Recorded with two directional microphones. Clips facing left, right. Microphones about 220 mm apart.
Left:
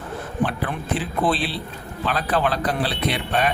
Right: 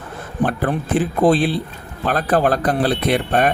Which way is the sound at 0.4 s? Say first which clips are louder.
Right 6 dB; 45° right (ahead or behind).